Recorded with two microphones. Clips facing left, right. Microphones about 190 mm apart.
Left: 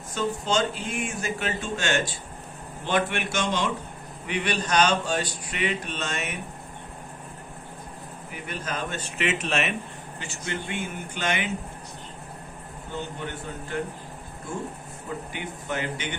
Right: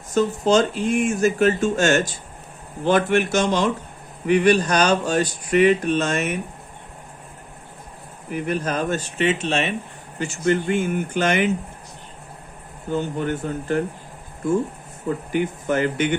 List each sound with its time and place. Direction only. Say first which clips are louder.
0.1 s speech: right 8 dB; 40° right (ahead or behind)
8.4 s speech: right 9 dB; 45° right (ahead or behind)
10.2 s speech: right 13 dB; 45° right (ahead or behind)
13.0 s speech: right 9 dB; 45° right (ahead or behind)
15.4 s speech: right 12 dB; 45° right (ahead or behind)